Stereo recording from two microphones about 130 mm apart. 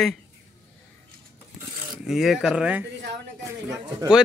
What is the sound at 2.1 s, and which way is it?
Speech, 5° right (ahead or behind).